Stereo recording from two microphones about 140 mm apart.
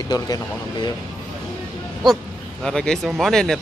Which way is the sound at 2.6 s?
5° left (ahead or behind).